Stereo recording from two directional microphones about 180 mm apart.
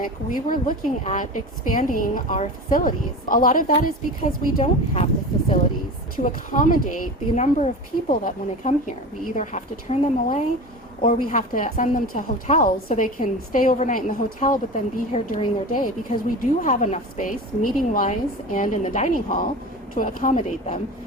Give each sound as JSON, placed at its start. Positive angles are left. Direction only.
{"t": 0.0, "sound": "a woman's voice", "side_deg": 50}
{"t": 6.2, "sound": "a woman's voice", "side_deg": 50}